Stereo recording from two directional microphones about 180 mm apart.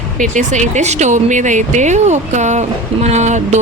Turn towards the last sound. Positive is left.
turn(degrees=-40)  # may be behind; listen again after turning